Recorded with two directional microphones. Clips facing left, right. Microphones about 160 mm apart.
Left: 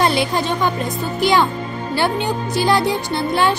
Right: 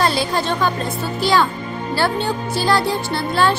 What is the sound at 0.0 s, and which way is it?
Music, 20° left (ahead or behind).